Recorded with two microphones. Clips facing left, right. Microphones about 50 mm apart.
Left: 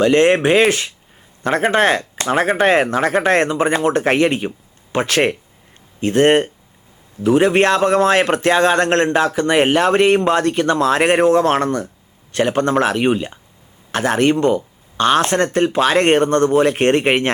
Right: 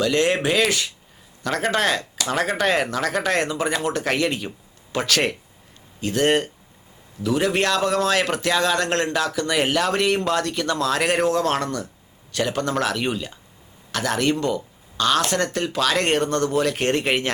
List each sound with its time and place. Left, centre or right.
0.0 s a man's voice: left